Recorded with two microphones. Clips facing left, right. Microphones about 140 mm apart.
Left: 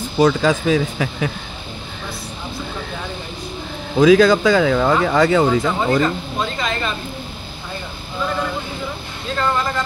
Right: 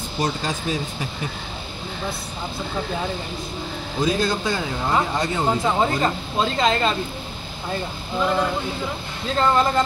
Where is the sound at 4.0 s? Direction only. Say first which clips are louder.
Left 11 dB; 90° left.